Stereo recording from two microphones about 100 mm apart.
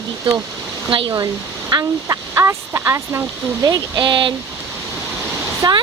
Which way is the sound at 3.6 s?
45° right (ahead or behind).